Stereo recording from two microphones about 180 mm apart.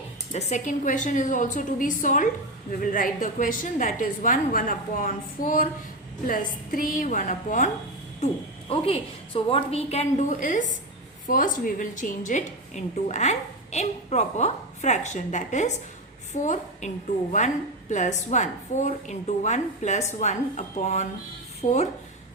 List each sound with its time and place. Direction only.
0.3 s a woman's voice: 40° left (ahead or behind)